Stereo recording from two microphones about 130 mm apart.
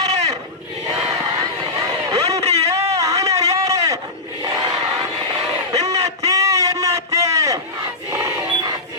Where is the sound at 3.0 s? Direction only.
25° right (ahead or behind).